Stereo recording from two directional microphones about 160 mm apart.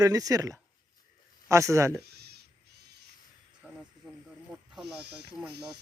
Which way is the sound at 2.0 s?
90° right.